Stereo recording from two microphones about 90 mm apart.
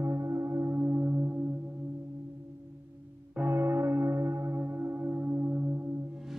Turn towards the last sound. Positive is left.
turn(degrees=-25)  # may be behind; listen again after turning